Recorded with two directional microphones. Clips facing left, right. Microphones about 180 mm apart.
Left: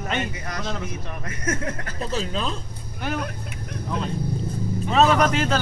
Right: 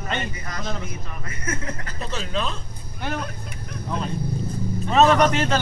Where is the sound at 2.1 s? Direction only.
35° left (ahead or behind).